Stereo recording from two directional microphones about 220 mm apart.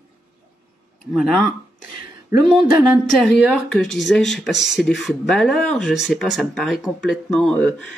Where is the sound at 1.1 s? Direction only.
Centre (ahead or behind).